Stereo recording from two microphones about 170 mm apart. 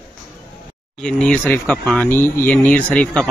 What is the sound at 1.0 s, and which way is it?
Speech, 5° left (ahead or behind).